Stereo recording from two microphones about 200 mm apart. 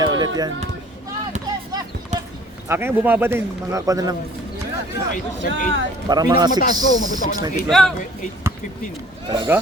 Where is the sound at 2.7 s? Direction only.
10° right (ahead or behind).